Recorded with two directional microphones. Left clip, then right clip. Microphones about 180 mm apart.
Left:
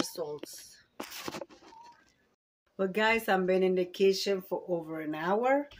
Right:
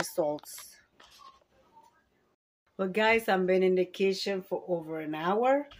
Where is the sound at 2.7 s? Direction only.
Centre (ahead or behind).